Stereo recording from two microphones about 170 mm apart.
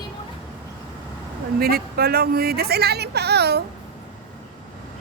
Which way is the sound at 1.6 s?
65° right (ahead or behind).